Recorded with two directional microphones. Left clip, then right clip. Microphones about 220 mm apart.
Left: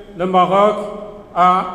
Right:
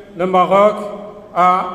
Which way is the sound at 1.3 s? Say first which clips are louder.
Even; 40° right (ahead or behind).